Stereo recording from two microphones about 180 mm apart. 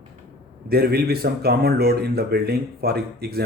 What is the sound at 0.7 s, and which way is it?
Speech, 60° right (ahead or behind).